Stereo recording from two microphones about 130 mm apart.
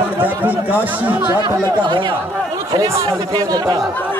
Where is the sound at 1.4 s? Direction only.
35° right (ahead or behind).